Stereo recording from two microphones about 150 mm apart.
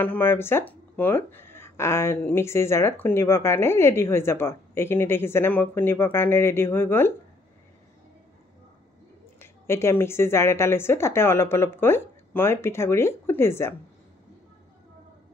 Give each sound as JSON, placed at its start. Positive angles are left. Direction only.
{"t": 0.0, "sound": "speech", "side_deg": 15}
{"t": 9.4, "sound": "speech", "side_deg": 15}